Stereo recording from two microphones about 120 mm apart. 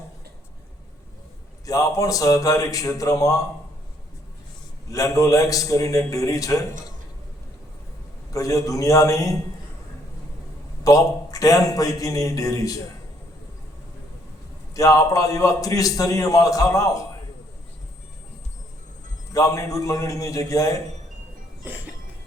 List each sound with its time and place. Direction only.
1.6 s a man's voice: 30° left (ahead or behind)
4.9 s a man's voice: 30° left (ahead or behind)
8.3 s a man's voice: 30° left (ahead or behind)
10.8 s a man's voice: 30° left (ahead or behind)
14.7 s a man's voice: 30° left (ahead or behind)
19.3 s a man's voice: 30° left (ahead or behind)